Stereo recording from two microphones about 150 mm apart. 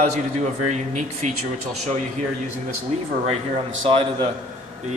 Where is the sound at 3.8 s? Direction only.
40° right (ahead or behind).